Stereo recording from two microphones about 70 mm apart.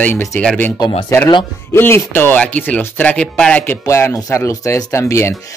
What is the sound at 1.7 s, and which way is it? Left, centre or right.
Speech, left.